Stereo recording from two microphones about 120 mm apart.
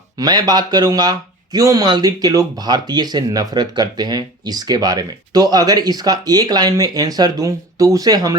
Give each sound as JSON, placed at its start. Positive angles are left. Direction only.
{"t": 0.2, "sound": "speech", "side_deg": -35}